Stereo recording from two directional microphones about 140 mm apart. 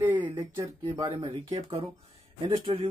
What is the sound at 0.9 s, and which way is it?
Speech, 35° right (ahead or behind).